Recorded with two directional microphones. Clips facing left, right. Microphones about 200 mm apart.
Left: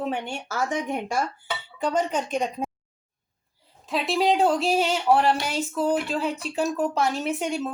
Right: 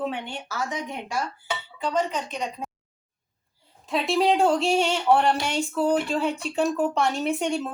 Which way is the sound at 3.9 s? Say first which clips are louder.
Right 1 dB; centre (ahead or behind).